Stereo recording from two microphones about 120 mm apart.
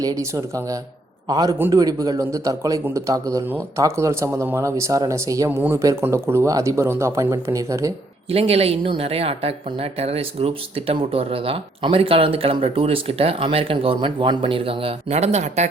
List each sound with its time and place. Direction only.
0.0 s a man's voice: 30° right (ahead or behind)
8.3 s a woman's voice: 55° right (ahead or behind); by 15.7 s 70° right (ahead or behind)